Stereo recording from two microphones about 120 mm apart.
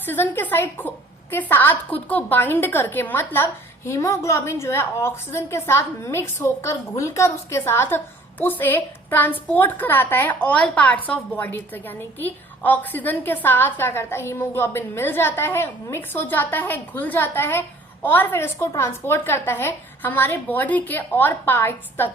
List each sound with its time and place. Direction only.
0.0 s a woman's voice: 15° left (ahead or behind)